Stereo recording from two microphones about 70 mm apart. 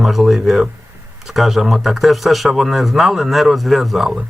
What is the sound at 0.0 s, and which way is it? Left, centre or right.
Speech, centre.